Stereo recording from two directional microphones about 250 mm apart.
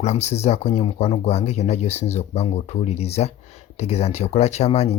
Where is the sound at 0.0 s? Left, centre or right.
Left.